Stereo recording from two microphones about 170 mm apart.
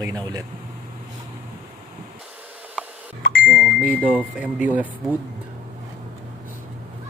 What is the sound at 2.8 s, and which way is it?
Beep, 5° right (ahead or behind).